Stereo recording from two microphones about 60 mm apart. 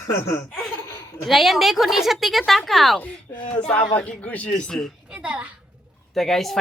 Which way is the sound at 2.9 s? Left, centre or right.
Left.